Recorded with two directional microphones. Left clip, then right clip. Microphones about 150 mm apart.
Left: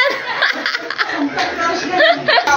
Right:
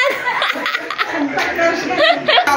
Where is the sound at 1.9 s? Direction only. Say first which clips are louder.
Left 2 dB; 40° left (ahead or behind).